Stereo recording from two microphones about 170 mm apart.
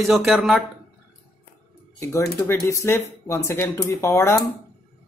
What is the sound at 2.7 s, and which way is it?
Speech, 15° left (ahead or behind).